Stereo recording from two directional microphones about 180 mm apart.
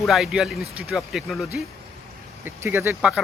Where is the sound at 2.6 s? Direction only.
10° right (ahead or behind).